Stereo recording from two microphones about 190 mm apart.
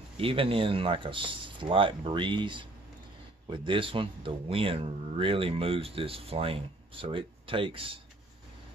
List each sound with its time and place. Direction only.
0.2 s speech: 30° right (ahead or behind)